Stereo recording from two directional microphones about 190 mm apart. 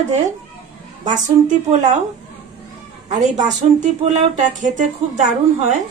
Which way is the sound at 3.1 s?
40° right (ahead or behind).